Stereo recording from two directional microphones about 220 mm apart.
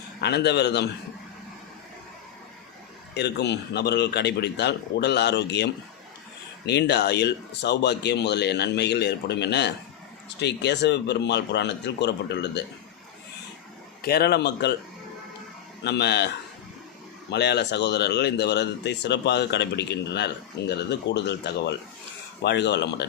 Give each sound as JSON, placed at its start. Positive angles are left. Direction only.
{"t": 0.2, "sound": "speech", "side_deg": 50}
{"t": 3.2, "sound": "speech", "side_deg": 50}
{"t": 14.0, "sound": "speech", "side_deg": 45}
{"t": 15.8, "sound": "speech", "side_deg": 50}
{"t": 17.3, "sound": "speech", "side_deg": 50}